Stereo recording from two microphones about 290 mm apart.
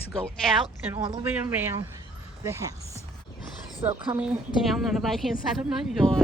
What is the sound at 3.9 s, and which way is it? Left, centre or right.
A woman's voice, centre.